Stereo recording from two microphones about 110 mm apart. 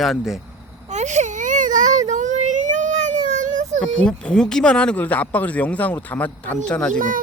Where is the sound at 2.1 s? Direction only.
90° right.